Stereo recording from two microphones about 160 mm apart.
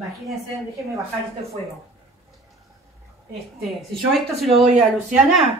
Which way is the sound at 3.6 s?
Centre (ahead or behind).